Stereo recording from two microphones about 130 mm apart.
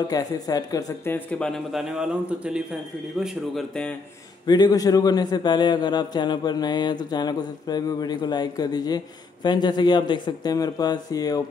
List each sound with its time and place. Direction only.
0.1 s speech: 30° left (ahead or behind)
1.1 s a man's voice: 10° left (ahead or behind)
4.5 s a man's voice: 30° left (ahead or behind)